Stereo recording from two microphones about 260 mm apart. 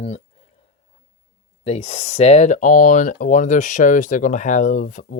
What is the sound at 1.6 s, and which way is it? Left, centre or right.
Speech, left.